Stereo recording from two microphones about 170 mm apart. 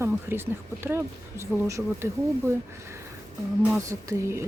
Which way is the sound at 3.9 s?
15° right (ahead or behind).